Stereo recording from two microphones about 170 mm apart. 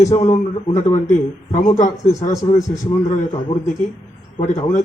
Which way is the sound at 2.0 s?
20° left (ahead or behind).